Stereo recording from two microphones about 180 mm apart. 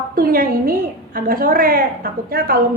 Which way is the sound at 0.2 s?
55° right (ahead or behind).